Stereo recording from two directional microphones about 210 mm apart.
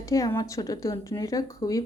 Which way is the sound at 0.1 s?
15° left (ahead or behind).